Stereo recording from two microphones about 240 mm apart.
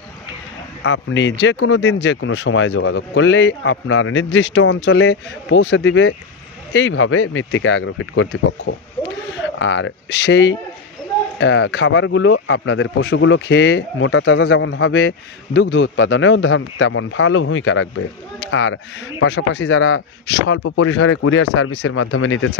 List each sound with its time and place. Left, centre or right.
0.8 s speech: left